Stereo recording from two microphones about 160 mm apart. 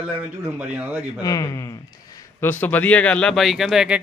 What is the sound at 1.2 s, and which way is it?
Speech, 20° left (ahead or behind).